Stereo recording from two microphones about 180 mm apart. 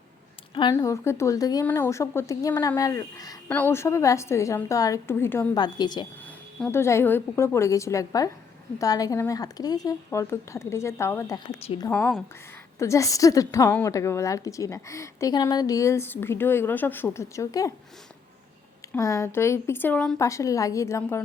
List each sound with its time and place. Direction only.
0.5 s a woman's voice: 20° left (ahead or behind)
5.5 s a woman's voice: 25° left (ahead or behind)
11.6 s a woman's voice: 30° left (ahead or behind)
11.9 s a woman's voice: 5° left (ahead or behind)
12.8 s a woman's voice: 15° left (ahead or behind)
18.9 s a woman's voice: 15° left (ahead or behind)